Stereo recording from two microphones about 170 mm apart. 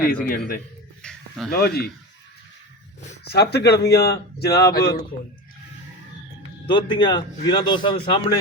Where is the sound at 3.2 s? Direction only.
75° left (ahead or behind).